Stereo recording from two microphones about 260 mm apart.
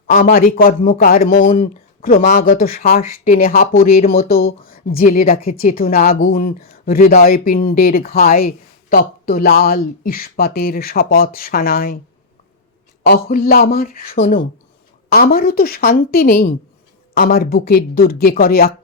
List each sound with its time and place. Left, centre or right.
0.1 s speech: left
13.1 s speech: left